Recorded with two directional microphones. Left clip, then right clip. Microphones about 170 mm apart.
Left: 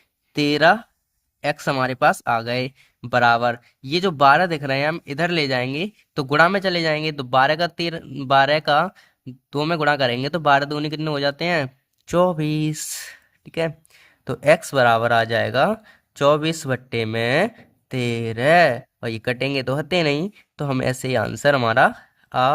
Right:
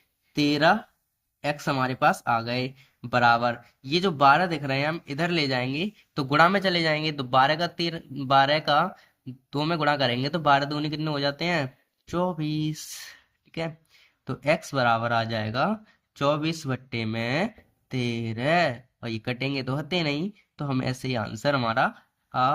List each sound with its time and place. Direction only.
0.3 s speech: 50° left (ahead or behind)